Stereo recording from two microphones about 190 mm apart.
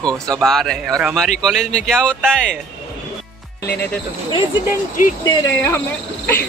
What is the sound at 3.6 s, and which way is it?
Speech, 10° left (ahead or behind).